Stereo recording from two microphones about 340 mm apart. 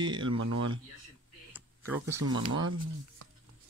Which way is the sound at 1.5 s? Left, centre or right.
Centre.